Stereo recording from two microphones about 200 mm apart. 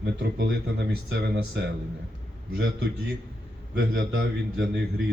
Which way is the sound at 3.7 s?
65° right (ahead or behind).